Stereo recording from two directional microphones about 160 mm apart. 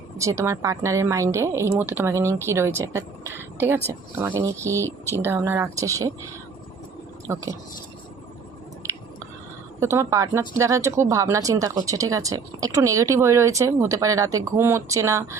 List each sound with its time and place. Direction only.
0.2 s speech: 20° right (ahead or behind)
7.3 s speech: 20° right (ahead or behind)
9.8 s speech: 20° right (ahead or behind)